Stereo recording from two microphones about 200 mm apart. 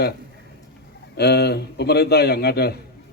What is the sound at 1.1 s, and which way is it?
A man's voice, 55° left (ahead or behind).